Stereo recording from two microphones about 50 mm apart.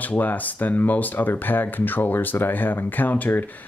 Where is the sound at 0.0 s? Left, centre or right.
Left.